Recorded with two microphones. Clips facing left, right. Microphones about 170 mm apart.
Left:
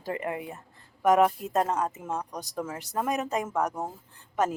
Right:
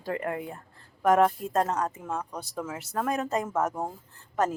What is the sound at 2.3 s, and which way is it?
Speech, 15° left (ahead or behind).